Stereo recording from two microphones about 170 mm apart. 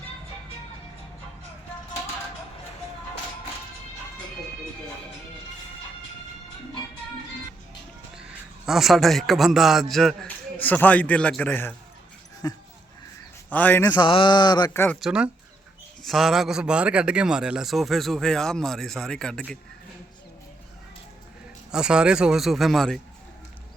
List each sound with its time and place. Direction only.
8.1 s speech: 5° right (ahead or behind)
12.4 s speech: 20° left (ahead or behind)
13.5 s a man's voice: 10° left (ahead or behind)
13.9 s speech: 30° left (ahead or behind)
14.7 s a man's voice: 15° left (ahead or behind)
15.0 s a man's voice: 5° right (ahead or behind)
21.7 s a man's voice: 5° right (ahead or behind)